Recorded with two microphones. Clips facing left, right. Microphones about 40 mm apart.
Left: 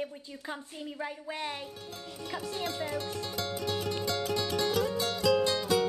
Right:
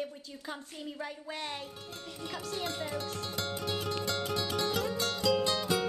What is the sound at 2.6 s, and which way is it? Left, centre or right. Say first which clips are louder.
Speech: left 2 dB; centre.